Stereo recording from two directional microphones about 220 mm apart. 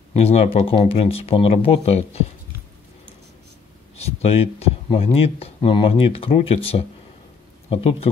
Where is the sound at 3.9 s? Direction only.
30° left (ahead or behind).